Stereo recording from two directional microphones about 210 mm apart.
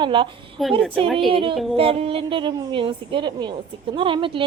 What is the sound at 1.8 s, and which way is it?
A woman's voice, 25° right (ahead or behind).